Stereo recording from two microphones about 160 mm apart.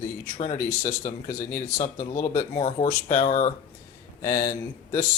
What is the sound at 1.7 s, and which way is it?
Speech, 50° left (ahead or behind).